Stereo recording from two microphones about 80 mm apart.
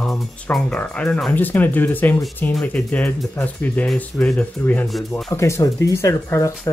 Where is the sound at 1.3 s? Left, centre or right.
Left.